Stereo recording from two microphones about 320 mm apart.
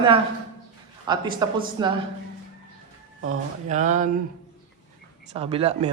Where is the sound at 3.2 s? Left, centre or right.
Right.